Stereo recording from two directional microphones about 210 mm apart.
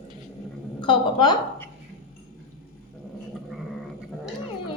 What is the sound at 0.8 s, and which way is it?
Speech, 20° left (ahead or behind).